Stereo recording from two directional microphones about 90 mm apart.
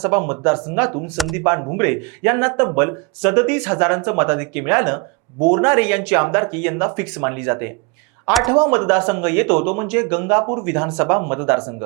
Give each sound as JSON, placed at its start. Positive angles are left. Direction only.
{"t": 0.0, "sound": "speech", "side_deg": -20}
{"t": 1.1, "sound": "speech", "side_deg": 0}
{"t": 1.7, "sound": "speech", "side_deg": -15}